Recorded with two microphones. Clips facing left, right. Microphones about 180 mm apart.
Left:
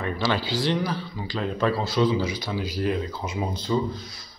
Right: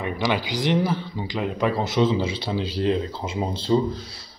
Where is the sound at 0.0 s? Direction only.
15° right (ahead or behind).